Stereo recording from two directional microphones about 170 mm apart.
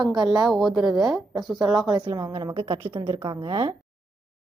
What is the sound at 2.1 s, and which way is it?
Speech, 20° right (ahead or behind).